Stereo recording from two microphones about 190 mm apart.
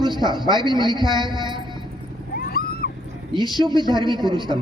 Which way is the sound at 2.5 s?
55° left (ahead or behind).